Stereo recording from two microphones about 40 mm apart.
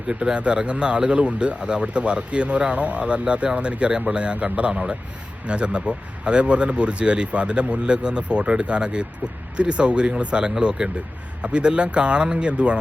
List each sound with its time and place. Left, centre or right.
0.1 s speech: right